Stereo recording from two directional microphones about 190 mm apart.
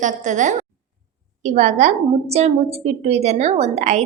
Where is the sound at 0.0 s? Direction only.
40° right (ahead or behind).